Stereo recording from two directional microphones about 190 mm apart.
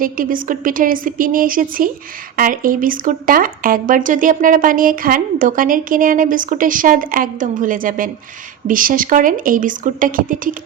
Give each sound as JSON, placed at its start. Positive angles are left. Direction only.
{"t": 0.0, "sound": "speech", "side_deg": -45}